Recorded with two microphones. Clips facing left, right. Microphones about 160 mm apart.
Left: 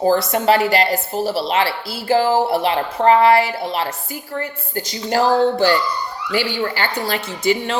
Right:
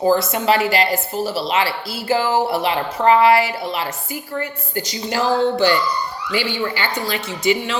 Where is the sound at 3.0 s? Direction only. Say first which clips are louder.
Left 1 dB; 45° left (ahead or behind).